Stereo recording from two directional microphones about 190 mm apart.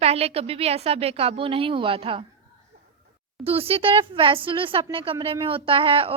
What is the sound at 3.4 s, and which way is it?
A woman's voice, 30° right (ahead or behind).